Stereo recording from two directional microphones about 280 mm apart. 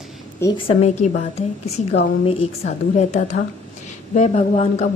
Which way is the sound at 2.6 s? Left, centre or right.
Left.